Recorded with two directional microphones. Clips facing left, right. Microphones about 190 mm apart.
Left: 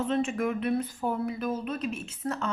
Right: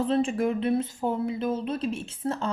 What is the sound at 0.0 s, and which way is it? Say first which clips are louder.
Speech: right 3 dB; 30° right (ahead or behind).